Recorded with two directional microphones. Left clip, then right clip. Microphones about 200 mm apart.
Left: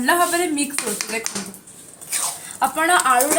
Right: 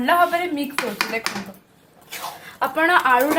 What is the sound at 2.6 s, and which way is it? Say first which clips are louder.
Speech: even; 35° right (ahead or behind).